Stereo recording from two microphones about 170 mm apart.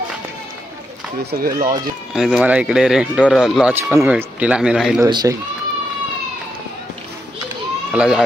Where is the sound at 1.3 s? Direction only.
55° right (ahead or behind).